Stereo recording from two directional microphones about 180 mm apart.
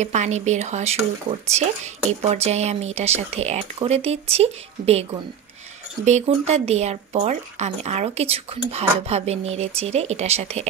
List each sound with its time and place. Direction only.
0.0 s speech: 40° right (ahead or behind)
6.0 s speech: 40° right (ahead or behind)